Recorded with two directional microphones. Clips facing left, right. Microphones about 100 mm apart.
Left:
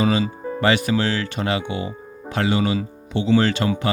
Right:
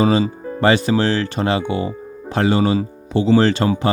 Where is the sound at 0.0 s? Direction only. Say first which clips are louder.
Right 4 dB; 35° right (ahead or behind).